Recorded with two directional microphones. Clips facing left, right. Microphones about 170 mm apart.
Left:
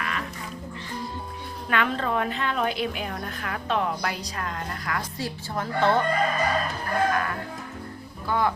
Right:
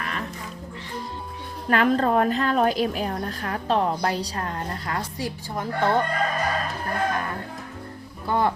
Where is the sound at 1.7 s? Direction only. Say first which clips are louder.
Right 6 dB; 40° right (ahead or behind).